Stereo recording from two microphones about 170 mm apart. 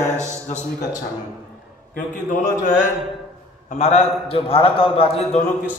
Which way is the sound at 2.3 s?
50° left (ahead or behind).